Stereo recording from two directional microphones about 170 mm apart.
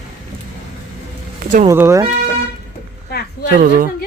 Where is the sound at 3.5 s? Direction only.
50° right (ahead or behind).